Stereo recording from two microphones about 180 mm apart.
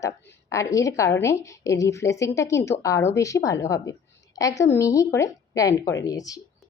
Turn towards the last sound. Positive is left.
turn(degrees=20)  # may be behind; listen again after turning